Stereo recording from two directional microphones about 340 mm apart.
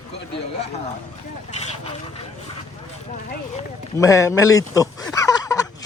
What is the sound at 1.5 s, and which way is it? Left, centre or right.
Speech, centre.